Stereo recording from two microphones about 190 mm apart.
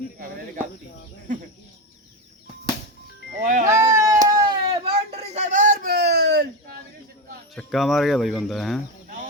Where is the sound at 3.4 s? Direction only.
40° right (ahead or behind).